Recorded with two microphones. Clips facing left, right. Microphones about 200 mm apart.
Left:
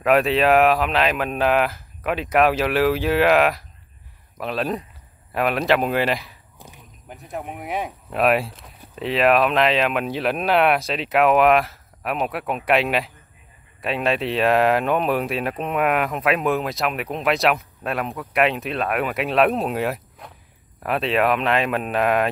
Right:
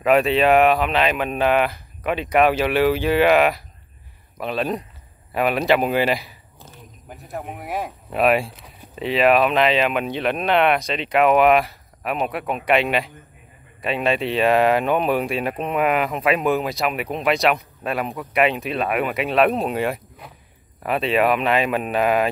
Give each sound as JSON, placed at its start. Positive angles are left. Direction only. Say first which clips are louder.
{"t": 0.0, "sound": "speech", "louder": "right 1 dB", "side_deg": 0}